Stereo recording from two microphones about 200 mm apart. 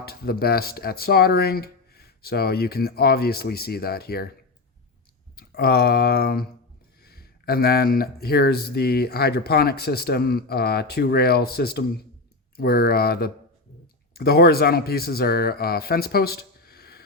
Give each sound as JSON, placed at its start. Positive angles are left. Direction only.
{"t": 0.0, "sound": "speech", "side_deg": 50}
{"t": 5.4, "sound": "speech", "side_deg": 50}